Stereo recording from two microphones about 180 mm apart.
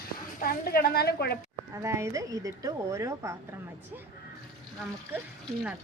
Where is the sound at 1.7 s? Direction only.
15° right (ahead or behind).